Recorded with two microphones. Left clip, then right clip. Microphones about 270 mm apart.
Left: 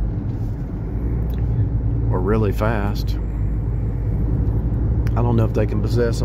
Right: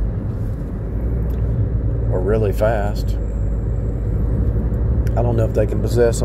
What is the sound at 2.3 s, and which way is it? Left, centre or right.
Speech, centre.